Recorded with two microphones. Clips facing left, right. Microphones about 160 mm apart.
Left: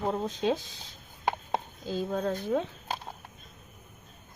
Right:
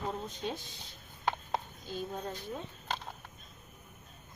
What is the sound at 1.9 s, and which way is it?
Speech, 90° left.